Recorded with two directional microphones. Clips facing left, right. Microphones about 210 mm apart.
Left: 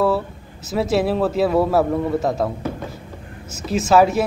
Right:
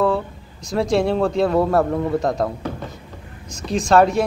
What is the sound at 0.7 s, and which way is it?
A man's voice, 5° left (ahead or behind).